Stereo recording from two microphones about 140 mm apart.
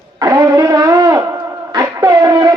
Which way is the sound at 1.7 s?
25° right (ahead or behind).